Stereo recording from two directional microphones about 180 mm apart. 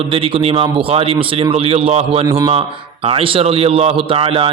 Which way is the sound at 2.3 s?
15° right (ahead or behind).